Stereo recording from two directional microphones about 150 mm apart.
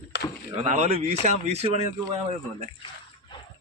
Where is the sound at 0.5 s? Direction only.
50° right (ahead or behind).